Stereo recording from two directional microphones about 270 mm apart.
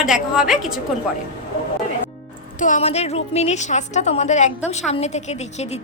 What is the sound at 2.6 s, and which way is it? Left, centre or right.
A woman's voice, left.